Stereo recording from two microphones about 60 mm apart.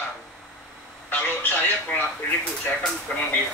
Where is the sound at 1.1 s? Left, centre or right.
Left.